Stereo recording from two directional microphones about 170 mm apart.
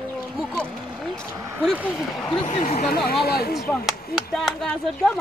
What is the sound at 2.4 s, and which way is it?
Speech, 45° left (ahead or behind).